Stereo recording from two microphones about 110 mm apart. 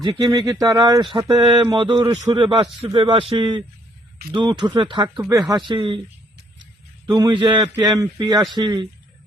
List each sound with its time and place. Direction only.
0.0 s speech: 40° right (ahead or behind)
5.3 s speech: 35° right (ahead or behind)
5.6 s speech: 50° right (ahead or behind)
7.1 s speech: 45° right (ahead or behind)
7.6 s speech: 30° right (ahead or behind)